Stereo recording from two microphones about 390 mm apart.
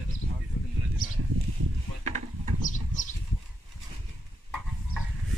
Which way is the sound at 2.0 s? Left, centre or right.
Centre.